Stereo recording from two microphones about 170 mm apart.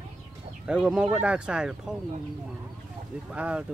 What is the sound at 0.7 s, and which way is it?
Speech, 5° right (ahead or behind).